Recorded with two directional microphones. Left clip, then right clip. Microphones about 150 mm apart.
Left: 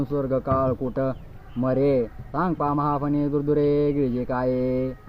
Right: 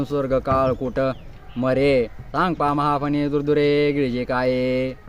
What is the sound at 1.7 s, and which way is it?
Speech, 55° right (ahead or behind).